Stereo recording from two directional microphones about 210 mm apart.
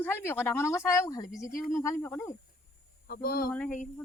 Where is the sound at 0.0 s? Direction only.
10° left (ahead or behind).